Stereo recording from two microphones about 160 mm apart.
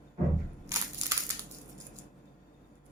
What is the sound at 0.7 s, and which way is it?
Crushing, 20° right (ahead or behind).